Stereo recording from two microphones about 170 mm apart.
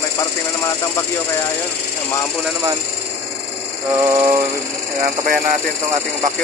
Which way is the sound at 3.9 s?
20° right (ahead or behind).